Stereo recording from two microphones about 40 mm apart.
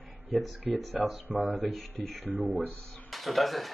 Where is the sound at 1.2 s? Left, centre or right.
Right.